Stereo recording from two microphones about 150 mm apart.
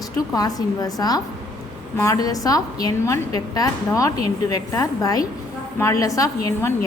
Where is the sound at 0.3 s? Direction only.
25° left (ahead or behind).